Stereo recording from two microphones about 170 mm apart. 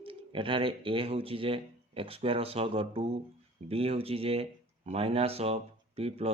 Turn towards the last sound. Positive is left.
turn(degrees=-35)  # may be behind; listen again after turning